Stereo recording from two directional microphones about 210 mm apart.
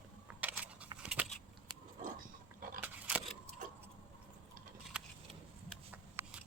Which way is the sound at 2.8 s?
5° right (ahead or behind).